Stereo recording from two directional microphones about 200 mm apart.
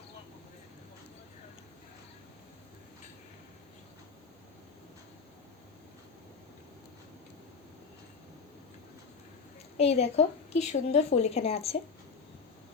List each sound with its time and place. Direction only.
9.7 s a woman's voice: 30° left (ahead or behind)